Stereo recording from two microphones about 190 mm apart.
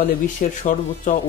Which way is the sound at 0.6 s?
45° left (ahead or behind).